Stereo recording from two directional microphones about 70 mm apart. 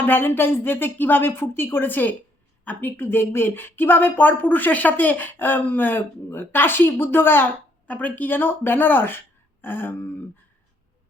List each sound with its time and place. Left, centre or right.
0.0 s a woman's voice: left
7.9 s speech: left